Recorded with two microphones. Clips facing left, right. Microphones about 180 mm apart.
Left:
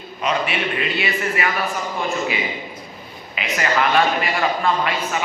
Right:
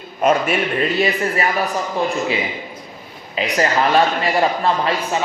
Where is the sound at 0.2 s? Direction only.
45° right (ahead or behind).